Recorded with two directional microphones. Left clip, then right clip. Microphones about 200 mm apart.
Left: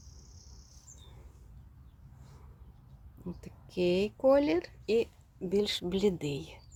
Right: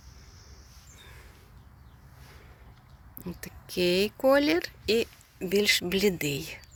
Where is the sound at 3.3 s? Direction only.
5° right (ahead or behind).